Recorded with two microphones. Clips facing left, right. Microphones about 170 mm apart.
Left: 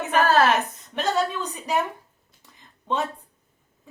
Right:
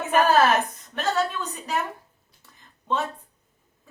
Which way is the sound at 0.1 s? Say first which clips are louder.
Right 1 dB; 15° right (ahead or behind).